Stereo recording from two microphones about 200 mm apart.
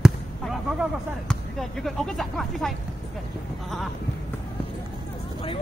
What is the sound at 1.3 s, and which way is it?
Speech, centre (ahead or behind).